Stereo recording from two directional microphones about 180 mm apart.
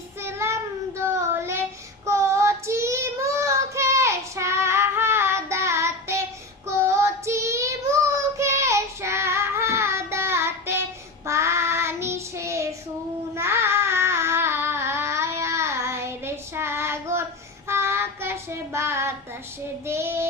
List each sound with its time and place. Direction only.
0.2 s child singing: 15° right (ahead or behind)
13.3 s a sound: 15° right (ahead or behind)
17.7 s child singing: 15° right (ahead or behind)